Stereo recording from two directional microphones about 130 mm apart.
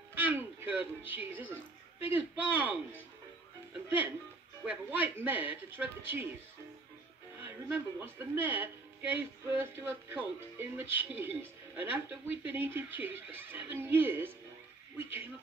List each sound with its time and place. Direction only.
0.1 s a woman's voice: 15° right (ahead or behind)
4.6 s a woman's voice: 15° right (ahead or behind)
7.3 s a woman's voice: 15° right (ahead or behind)